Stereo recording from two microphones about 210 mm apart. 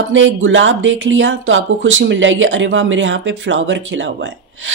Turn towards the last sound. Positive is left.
turn(degrees=-60)  # may be behind; listen again after turning